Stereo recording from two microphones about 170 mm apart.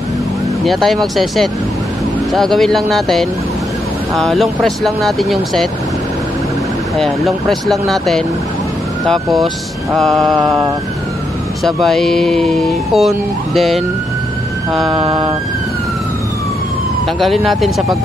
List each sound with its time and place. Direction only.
0.7 s speech: centre (ahead or behind)
7.0 s speech: centre (ahead or behind)
11.6 s speech: centre (ahead or behind)
15.0 s vehicle: 30° right (ahead or behind)
17.2 s speech: centre (ahead or behind)